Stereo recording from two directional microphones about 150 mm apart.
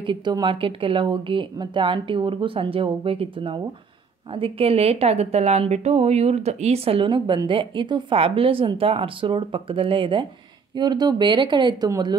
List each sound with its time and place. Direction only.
0.0 s a woman's voice: 30° right (ahead or behind)